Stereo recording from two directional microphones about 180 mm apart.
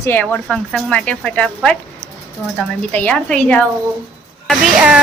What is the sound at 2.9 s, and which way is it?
Speech, 5° left (ahead or behind).